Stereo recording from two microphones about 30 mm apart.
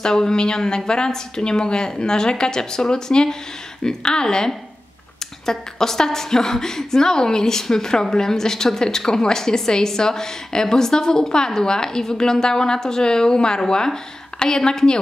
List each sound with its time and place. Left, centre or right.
0.0 s a woman's voice: left